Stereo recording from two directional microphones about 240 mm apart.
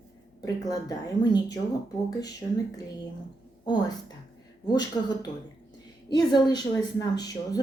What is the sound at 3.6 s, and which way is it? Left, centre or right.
A woman's voice, centre.